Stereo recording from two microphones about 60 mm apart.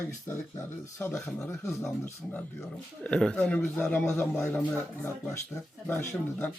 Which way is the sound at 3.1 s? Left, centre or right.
Centre.